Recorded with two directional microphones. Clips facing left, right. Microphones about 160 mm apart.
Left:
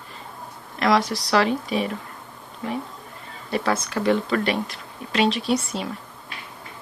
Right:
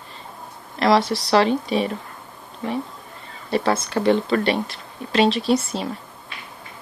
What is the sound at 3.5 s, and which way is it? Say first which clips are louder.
Speech: right 3 dB; 30° right (ahead or behind).